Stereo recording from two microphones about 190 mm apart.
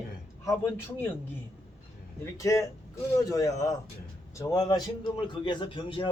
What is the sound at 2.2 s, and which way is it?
A man's voice, 15° left (ahead or behind).